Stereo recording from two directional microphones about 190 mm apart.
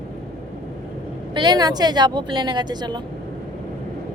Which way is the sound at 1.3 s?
25° right (ahead or behind).